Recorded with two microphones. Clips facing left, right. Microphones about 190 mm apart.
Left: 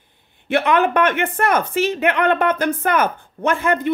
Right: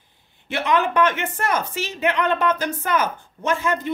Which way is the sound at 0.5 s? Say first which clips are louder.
Left 5 dB; 55° left (ahead or behind).